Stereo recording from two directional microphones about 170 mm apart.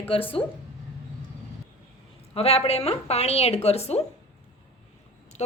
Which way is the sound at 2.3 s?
35° left (ahead or behind).